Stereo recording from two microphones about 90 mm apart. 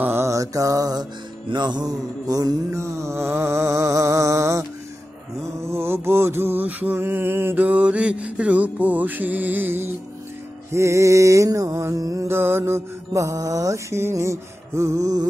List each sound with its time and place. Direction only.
0.0 s mantra: 30° right (ahead or behind)
1.5 s mantra: 55° right (ahead or behind)
12.4 s mantra: 25° right (ahead or behind)